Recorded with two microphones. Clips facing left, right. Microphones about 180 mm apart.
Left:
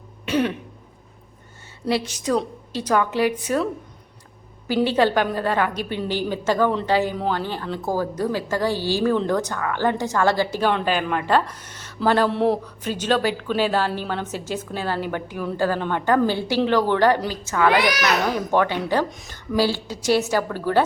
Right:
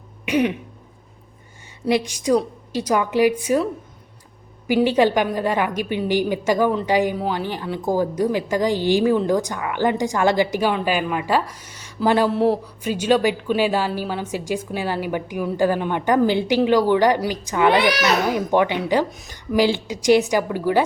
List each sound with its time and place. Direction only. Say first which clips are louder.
0.3 s throat clearing: right 2 dB; 15° right (ahead or behind)
1.9 s a woman's voice: right 4 dB; 15° right (ahead or behind)
4.7 s a woman's voice: right 2 dB; 15° right (ahead or behind)
17.7 s a child's voice: right 2 dB; 30° right (ahead or behind)
18.3 s a woman's voice: right 2 dB; 15° right (ahead or behind)